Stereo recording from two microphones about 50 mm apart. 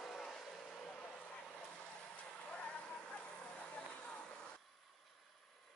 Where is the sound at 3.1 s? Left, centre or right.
Left.